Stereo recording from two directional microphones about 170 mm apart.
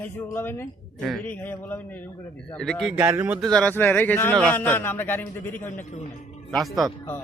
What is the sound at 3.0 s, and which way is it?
Speech, 10° right (ahead or behind).